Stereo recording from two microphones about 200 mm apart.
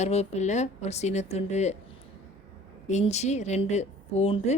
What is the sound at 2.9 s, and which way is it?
Speech, 35° left (ahead or behind).